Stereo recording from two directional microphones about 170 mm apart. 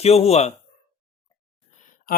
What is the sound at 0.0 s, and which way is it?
Speech, 35° left (ahead or behind).